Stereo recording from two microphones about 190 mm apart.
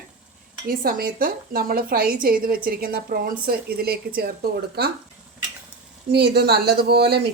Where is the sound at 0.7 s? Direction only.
50° right (ahead or behind).